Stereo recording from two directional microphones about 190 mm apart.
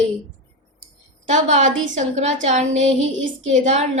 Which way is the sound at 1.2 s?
40° right (ahead or behind).